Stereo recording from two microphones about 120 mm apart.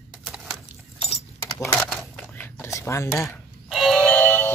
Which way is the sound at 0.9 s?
60° left (ahead or behind).